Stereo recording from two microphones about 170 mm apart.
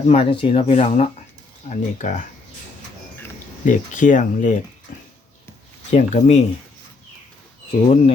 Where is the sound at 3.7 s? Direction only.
50° left (ahead or behind).